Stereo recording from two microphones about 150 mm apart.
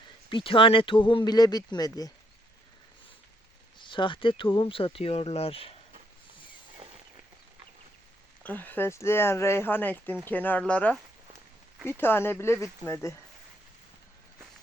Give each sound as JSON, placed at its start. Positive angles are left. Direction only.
{"t": 0.3, "sound": "speech", "side_deg": 35}
{"t": 3.8, "sound": "speech", "side_deg": 35}
{"t": 8.4, "sound": "speech", "side_deg": 10}